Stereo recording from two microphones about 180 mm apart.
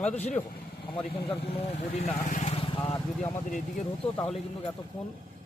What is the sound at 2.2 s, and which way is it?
Vehicle, 40° left (ahead or behind).